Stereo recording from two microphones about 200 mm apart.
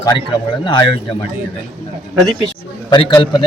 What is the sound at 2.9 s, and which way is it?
Speech, 25° left (ahead or behind).